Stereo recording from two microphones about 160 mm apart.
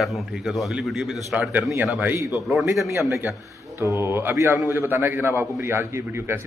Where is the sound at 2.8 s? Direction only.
15° right (ahead or behind).